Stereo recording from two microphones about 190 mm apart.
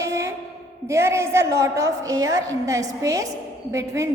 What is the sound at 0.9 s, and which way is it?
A woman's voice, 15° right (ahead or behind).